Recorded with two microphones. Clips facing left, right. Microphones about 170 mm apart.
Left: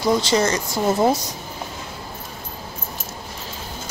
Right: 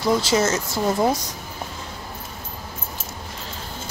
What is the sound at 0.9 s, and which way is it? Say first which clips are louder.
Speech: left 3 dB; 10° left (ahead or behind).